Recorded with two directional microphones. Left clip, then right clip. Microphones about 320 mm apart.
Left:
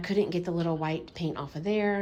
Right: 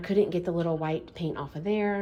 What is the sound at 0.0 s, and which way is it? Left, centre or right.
Speech, centre.